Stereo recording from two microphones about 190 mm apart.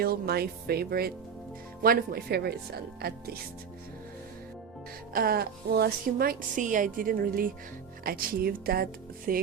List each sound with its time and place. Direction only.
0.0 s a woman's voice: 55° right (ahead or behind)
5.1 s a woman's voice: 50° right (ahead or behind)